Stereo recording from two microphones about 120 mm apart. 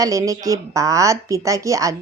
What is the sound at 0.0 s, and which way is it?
A woman's voice, 25° right (ahead or behind).